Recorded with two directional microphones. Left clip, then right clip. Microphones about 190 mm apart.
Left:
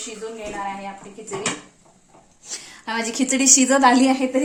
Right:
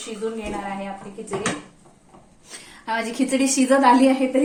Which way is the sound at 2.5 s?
45° left (ahead or behind).